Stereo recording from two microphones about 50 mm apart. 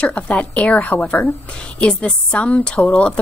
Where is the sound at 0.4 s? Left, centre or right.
Left.